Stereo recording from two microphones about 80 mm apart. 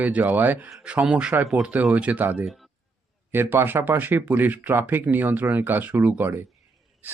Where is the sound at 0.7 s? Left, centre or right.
Centre.